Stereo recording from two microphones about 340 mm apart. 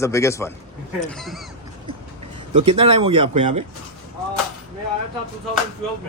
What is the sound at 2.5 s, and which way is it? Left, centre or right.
Speech, centre.